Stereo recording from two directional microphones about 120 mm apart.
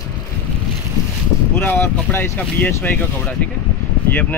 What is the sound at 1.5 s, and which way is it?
Speech, 15° left (ahead or behind).